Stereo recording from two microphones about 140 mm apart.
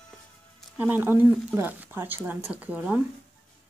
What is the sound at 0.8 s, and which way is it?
Speech, 15° right (ahead or behind).